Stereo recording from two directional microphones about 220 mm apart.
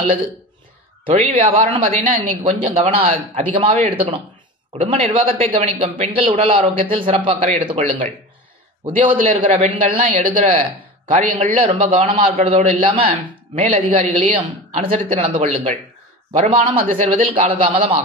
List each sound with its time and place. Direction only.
1.0 s speech: 25° right (ahead or behind)